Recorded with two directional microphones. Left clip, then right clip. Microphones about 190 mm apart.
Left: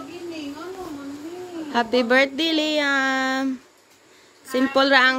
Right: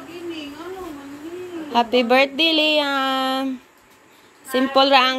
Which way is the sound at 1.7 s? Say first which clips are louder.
Right 2 dB; 5° left (ahead or behind).